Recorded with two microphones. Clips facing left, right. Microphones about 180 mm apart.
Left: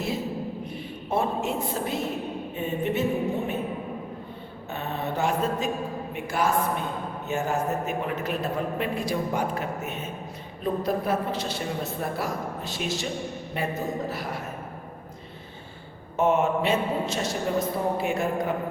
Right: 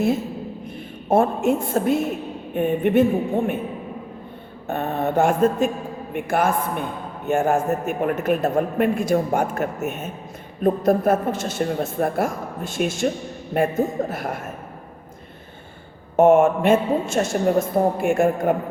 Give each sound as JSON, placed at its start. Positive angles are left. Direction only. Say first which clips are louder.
{"t": 1.0, "sound": "speech", "louder": "right 8 dB", "side_deg": -50}
{"t": 4.7, "sound": "speech", "louder": "right 8 dB", "side_deg": -50}
{"t": 16.1, "sound": "speech", "louder": "right 8 dB", "side_deg": -50}